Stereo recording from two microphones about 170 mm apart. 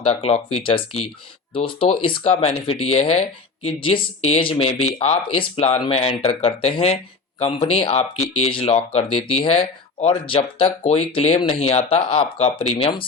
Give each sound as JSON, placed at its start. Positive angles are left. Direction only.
{"t": 0.0, "sound": "speech", "side_deg": 35}